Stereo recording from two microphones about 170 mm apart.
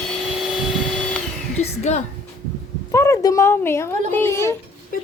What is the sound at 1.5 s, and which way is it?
Speech, 40° left (ahead or behind).